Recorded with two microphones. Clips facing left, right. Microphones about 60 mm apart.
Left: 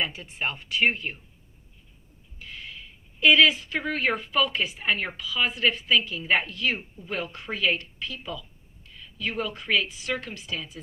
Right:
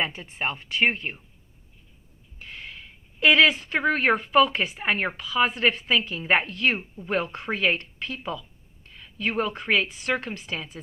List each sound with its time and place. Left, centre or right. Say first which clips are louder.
0.2 s speech: right 2 dB; right
2.4 s speech: right 1 dB; right